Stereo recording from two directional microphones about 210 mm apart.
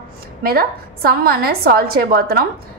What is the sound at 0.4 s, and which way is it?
A woman's voice, 45° right (ahead or behind).